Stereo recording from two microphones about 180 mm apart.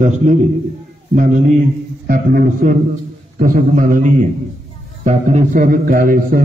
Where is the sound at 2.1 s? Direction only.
50° right (ahead or behind).